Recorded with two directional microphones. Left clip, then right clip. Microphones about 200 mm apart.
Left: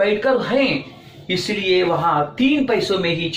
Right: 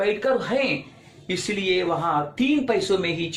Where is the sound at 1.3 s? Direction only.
50° right (ahead or behind).